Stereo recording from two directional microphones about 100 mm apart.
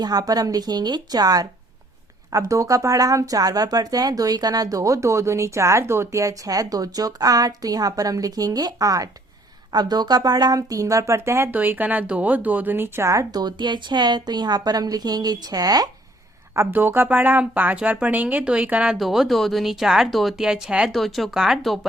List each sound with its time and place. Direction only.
0.0 s speech: 40° right (ahead or behind)
16.6 s speech: 20° right (ahead or behind)
18.9 s speech: centre (ahead or behind)